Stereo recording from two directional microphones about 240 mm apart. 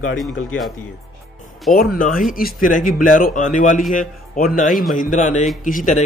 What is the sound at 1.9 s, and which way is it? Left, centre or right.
A man's voice, left.